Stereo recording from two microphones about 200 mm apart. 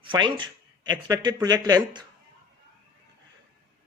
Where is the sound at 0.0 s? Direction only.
25° right (ahead or behind).